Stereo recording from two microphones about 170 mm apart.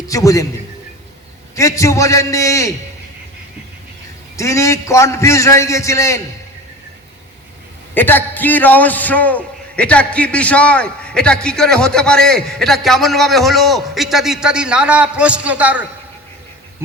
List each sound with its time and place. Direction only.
0.1 s a man's voice: 20° left (ahead or behind)
1.5 s a man's voice: 20° left (ahead or behind)
4.4 s a man's voice: 20° left (ahead or behind)
7.9 s a man's voice: 10° left (ahead or behind); by 15.9 s 10° right (ahead or behind)